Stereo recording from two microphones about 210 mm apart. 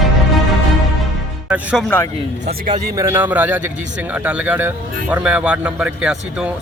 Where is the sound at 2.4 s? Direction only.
40° right (ahead or behind).